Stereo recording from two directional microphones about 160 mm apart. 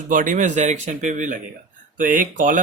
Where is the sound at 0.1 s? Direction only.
55° right (ahead or behind).